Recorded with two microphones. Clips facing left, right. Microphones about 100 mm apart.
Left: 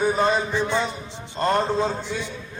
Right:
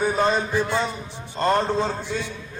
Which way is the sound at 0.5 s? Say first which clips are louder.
Even; 10° right (ahead or behind).